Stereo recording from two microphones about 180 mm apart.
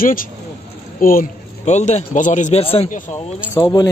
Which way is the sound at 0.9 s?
50° left (ahead or behind).